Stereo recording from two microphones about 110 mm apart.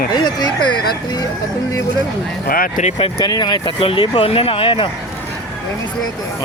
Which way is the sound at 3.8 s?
55° left (ahead or behind).